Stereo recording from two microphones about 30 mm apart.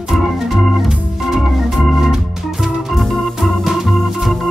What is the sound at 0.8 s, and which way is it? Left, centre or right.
Organ, centre.